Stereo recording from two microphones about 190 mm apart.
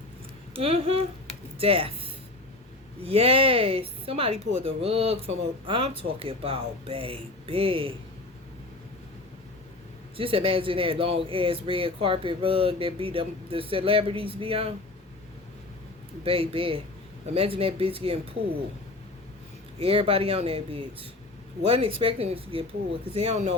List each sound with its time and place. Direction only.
0.5 s a woman's voice: 30° right (ahead or behind)
3.0 s a woman's voice: 30° right (ahead or behind)
10.2 s speech: 30° right (ahead or behind)
16.2 s speech: 30° right (ahead or behind)
19.8 s a woman's voice: 30° right (ahead or behind)